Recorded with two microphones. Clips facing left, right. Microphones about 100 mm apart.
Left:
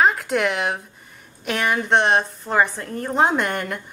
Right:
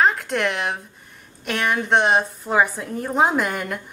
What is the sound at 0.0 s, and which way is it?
A woman's voice, centre (ahead or behind).